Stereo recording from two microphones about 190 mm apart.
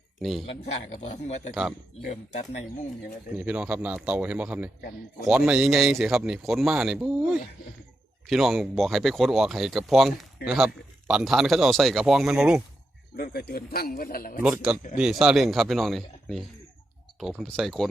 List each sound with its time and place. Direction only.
0.2 s speech: centre (ahead or behind)
0.4 s a man's voice: 35° left (ahead or behind)
3.3 s speech: 5° right (ahead or behind)
13.1 s a man's voice: 55° left (ahead or behind)
14.4 s speech: 5° right (ahead or behind)